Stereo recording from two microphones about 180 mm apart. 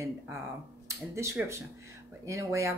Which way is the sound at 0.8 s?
15° right (ahead or behind).